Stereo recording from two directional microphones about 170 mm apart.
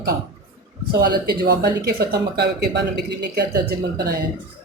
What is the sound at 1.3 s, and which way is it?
Speech, 70° right (ahead or behind).